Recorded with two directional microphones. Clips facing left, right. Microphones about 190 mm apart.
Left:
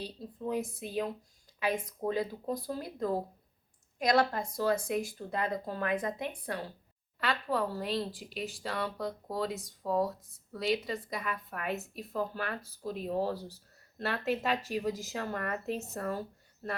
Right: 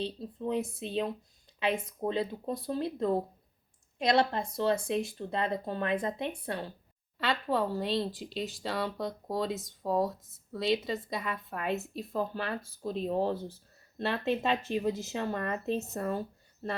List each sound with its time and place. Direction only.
0.0 s a woman's voice: 25° right (ahead or behind)